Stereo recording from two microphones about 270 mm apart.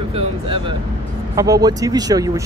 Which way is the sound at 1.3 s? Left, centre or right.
Centre.